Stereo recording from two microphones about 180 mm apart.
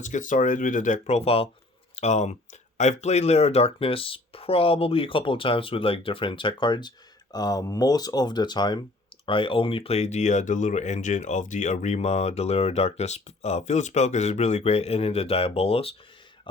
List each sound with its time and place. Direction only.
0.0 s speech: 45° left (ahead or behind)